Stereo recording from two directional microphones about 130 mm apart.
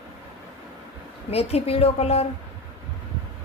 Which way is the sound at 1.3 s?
50° left (ahead or behind).